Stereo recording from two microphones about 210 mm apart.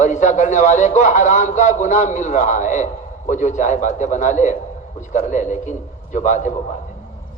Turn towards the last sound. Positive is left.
turn(degrees=35)  # may be behind; listen again after turning